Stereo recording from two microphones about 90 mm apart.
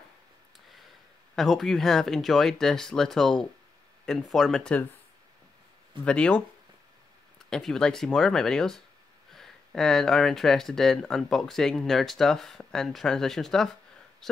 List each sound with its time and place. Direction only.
1.3 s speech: centre (ahead or behind)
6.0 s speech: 10° left (ahead or behind)
7.4 s speech: 5° left (ahead or behind)